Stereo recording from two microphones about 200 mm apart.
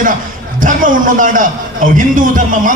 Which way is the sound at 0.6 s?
40° right (ahead or behind).